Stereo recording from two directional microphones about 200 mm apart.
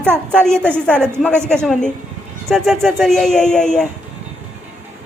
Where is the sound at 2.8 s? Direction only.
Centre (ahead or behind).